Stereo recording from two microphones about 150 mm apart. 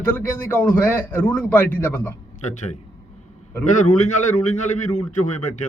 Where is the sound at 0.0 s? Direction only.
10° left (ahead or behind).